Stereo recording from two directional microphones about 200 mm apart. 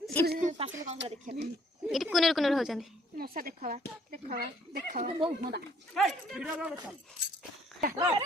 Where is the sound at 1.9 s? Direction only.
Centre (ahead or behind).